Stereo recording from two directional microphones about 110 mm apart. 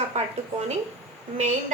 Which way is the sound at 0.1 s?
90° right.